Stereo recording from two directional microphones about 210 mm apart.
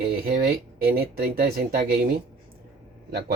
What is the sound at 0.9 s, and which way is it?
Speech, 45° right (ahead or behind).